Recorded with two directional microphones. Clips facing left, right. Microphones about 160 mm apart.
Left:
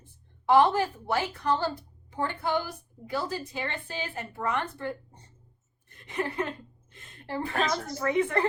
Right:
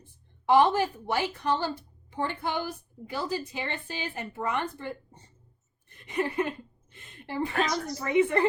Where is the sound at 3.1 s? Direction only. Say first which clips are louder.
Even; 15° right (ahead or behind).